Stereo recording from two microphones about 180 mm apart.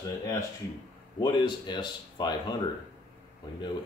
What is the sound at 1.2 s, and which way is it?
Speech, 25° left (ahead or behind).